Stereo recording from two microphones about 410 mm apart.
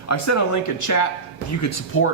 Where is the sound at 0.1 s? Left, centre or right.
Left.